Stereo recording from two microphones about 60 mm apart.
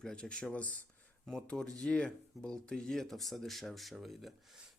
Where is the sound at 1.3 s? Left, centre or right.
Centre.